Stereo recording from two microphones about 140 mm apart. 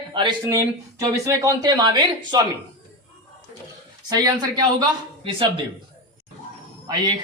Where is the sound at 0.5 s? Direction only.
25° right (ahead or behind).